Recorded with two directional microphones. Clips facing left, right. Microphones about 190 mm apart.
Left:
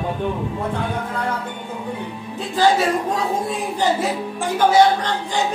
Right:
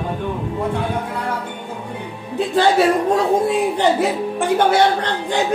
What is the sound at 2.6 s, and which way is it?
Speech, 65° right (ahead or behind).